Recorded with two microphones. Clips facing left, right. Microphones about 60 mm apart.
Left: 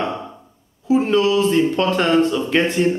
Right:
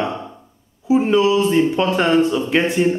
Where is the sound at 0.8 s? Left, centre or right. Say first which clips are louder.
Right 1 dB; centre.